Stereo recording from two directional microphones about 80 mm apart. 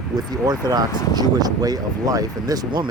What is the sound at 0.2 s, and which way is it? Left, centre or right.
Speech, right.